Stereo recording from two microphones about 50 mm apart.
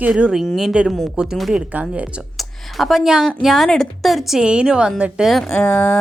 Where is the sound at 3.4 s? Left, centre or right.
Centre.